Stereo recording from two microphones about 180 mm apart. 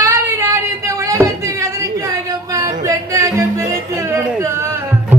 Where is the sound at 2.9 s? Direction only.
15° right (ahead or behind).